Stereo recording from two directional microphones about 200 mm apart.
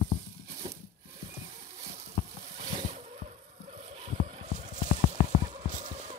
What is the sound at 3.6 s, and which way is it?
Vehicle, 35° right (ahead or behind).